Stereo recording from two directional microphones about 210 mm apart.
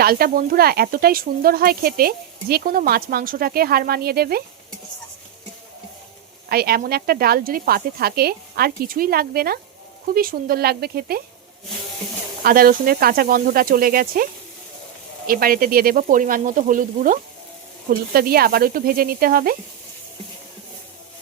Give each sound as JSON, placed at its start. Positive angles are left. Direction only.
{"t": 0.0, "sound": "speech", "side_deg": -45}
{"t": 6.5, "sound": "speech", "side_deg": -45}
{"t": 12.4, "sound": "speech", "side_deg": -45}
{"t": 15.3, "sound": "sizzle", "side_deg": -45}
{"t": 18.1, "sound": "speech", "side_deg": -45}